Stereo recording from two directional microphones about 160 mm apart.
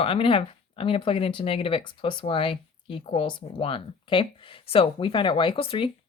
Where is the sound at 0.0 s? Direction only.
35° left (ahead or behind).